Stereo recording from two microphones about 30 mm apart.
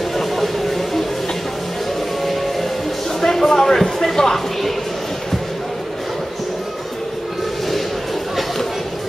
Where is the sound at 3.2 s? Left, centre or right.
Centre.